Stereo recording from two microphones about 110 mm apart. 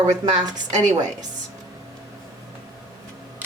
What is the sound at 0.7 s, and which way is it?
Speech, 90° right.